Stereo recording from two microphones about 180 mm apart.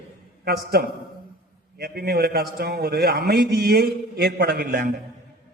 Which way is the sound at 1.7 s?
60° right (ahead or behind).